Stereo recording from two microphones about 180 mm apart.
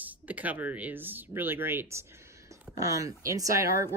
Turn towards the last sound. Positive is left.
turn(degrees=-15)  # may be behind; listen again after turning